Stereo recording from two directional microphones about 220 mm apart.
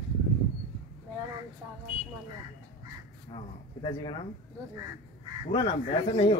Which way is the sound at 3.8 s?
20° left (ahead or behind).